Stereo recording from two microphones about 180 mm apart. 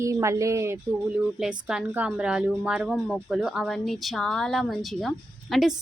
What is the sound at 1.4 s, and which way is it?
A woman's voice, 5° right (ahead or behind).